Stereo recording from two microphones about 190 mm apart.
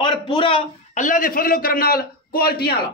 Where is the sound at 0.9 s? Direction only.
45° left (ahead or behind).